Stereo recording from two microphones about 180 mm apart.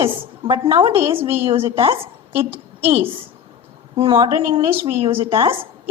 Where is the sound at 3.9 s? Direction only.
25° right (ahead or behind).